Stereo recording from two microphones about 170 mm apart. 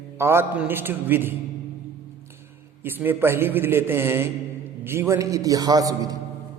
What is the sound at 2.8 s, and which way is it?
A man's voice, 10° right (ahead or behind).